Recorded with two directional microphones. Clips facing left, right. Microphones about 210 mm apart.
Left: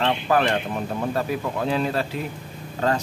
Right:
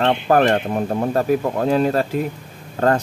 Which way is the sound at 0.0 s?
45° right (ahead or behind).